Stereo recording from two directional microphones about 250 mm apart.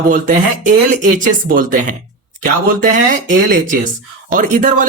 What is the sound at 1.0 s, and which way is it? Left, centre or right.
Speech, right.